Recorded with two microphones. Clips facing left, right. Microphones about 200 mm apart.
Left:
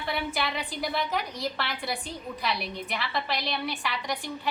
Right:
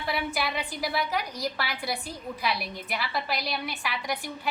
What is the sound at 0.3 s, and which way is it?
A woman's voice, centre (ahead or behind).